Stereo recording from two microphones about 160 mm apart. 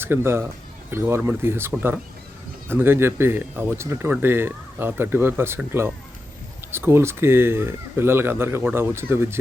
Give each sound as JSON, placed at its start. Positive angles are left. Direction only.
{"t": 0.0, "sound": "speech", "side_deg": -15}